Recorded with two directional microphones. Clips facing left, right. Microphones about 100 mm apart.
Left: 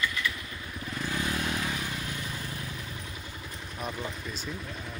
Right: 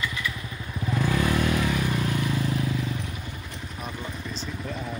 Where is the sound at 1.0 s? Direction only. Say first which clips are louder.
Right 7 dB; 90° right.